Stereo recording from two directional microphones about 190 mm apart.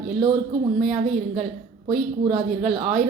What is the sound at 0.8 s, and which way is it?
A woman's voice, 40° right (ahead or behind).